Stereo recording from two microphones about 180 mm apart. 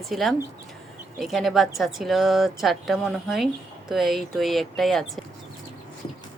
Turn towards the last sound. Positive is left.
turn(degrees=0)  # may be behind; listen again after turning